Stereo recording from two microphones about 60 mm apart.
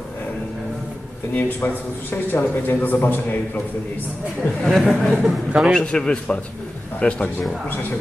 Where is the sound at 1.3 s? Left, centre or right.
Left.